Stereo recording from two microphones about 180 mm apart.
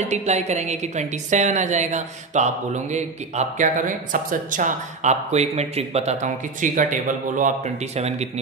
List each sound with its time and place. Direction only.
0.1 s a woman's voice: 40° right (ahead or behind)